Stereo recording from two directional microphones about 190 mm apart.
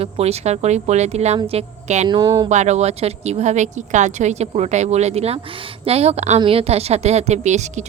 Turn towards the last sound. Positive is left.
turn(degrees=-40)  # may be behind; listen again after turning